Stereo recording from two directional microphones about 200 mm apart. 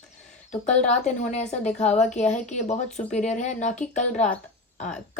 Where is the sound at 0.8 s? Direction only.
35° left (ahead or behind).